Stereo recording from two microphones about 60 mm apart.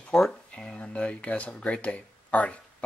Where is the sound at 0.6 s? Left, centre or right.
Left.